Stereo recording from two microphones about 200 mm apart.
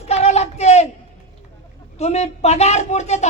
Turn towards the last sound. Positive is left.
turn(degrees=35)  # may be behind; listen again after turning